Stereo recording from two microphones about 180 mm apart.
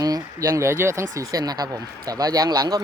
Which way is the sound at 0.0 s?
20° right (ahead or behind).